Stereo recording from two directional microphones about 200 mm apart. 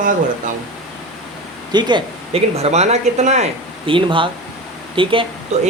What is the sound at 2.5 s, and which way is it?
A man's voice, 30° right (ahead or behind).